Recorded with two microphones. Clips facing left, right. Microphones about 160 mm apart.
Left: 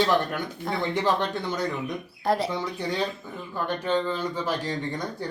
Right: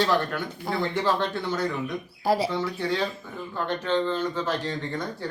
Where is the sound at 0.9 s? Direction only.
20° left (ahead or behind).